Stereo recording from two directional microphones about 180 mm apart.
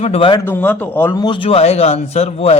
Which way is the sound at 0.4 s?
10° left (ahead or behind).